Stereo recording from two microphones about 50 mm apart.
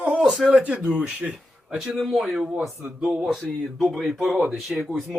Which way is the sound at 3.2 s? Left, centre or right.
Centre.